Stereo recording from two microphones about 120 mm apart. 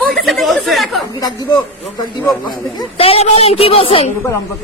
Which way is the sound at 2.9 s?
55° left (ahead or behind).